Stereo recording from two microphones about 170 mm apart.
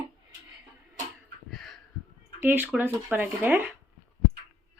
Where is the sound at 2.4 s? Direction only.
10° right (ahead or behind).